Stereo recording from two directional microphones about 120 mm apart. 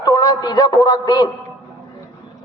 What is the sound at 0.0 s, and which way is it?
A man's voice, 35° left (ahead or behind).